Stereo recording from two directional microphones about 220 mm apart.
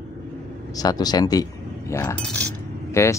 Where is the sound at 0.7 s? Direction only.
15° left (ahead or behind).